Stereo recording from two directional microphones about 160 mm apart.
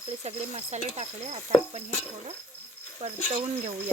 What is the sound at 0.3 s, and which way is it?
Speech, 45° right (ahead or behind).